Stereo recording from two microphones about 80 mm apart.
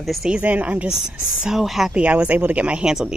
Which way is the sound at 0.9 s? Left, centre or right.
Centre.